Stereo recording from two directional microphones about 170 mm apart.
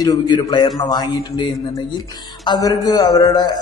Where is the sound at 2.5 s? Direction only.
20° left (ahead or behind).